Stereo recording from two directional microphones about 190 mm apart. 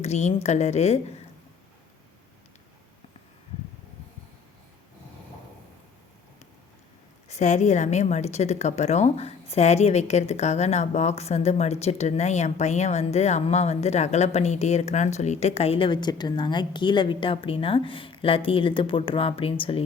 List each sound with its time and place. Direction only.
0.0 s a woman's voice: 35° left (ahead or behind)
7.3 s a woman's voice: 40° left (ahead or behind)